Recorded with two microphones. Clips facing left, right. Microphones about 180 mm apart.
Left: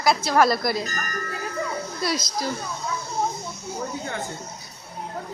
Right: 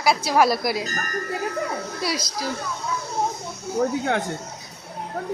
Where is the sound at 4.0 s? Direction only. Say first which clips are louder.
Right 7 dB; 90° right.